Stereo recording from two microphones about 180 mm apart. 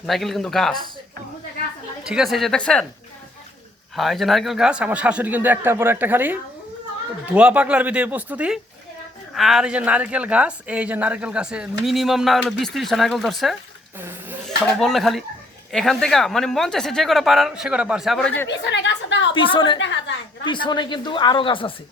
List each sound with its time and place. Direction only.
0.0 s speech: centre (ahead or behind)
2.0 s speech: 5° right (ahead or behind)
3.9 s a man's voice: centre (ahead or behind)
18.4 s a woman's voice: 80° left
19.3 s speech: 30° left (ahead or behind)
19.8 s a woman's voice: 90° left
20.5 s speech: 25° left (ahead or behind)